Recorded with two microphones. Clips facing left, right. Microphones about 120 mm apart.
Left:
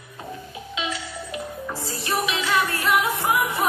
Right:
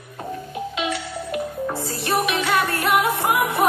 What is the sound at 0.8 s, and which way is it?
Music, 50° right (ahead or behind).